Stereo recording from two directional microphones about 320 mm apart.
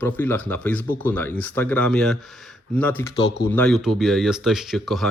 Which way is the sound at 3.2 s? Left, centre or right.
Left.